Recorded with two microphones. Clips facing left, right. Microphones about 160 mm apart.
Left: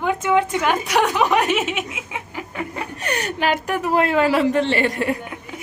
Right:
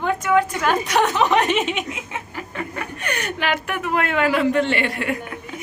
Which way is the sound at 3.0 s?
40° left (ahead or behind).